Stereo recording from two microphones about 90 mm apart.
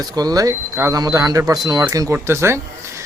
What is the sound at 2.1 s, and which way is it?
Speech, 30° right (ahead or behind).